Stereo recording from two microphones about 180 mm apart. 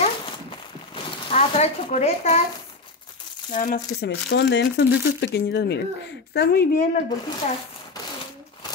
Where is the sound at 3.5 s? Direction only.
45° left (ahead or behind).